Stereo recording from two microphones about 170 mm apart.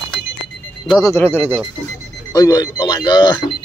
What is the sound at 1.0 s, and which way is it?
Speech, 15° left (ahead or behind).